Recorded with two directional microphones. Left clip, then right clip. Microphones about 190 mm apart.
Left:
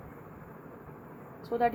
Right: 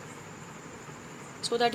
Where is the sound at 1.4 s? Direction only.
Centre (ahead or behind).